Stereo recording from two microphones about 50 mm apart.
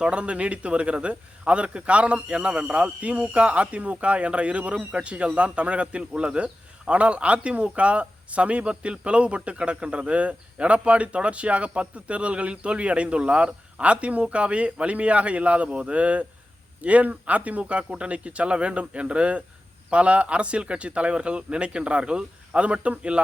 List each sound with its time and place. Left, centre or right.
0.0 s a man's voice: right